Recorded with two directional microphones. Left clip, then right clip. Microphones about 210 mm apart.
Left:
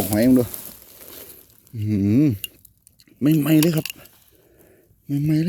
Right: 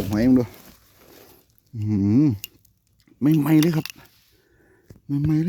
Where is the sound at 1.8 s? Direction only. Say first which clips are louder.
Left 1 dB; 15° right (ahead or behind).